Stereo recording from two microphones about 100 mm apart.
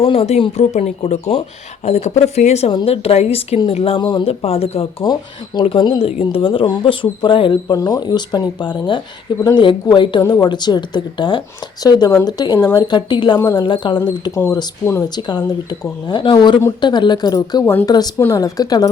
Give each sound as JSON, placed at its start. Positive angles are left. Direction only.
{"t": 0.0, "sound": "speech", "side_deg": 70}
{"t": 2.8, "sound": "speech", "side_deg": 75}
{"t": 3.7, "sound": "speech", "side_deg": 75}
{"t": 5.6, "sound": "speech", "side_deg": 55}
{"t": 6.0, "sound": "speech", "side_deg": 75}
{"t": 6.3, "sound": "speech", "side_deg": 60}
{"t": 7.7, "sound": "speech", "side_deg": 40}
{"t": 14.3, "sound": "speech", "side_deg": 30}
{"t": 15.1, "sound": "speech", "side_deg": 45}